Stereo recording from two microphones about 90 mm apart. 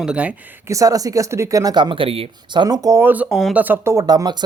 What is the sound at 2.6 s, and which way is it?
Speech, 45° right (ahead or behind).